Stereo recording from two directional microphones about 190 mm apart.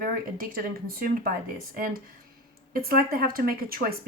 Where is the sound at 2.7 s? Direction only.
50° right (ahead or behind).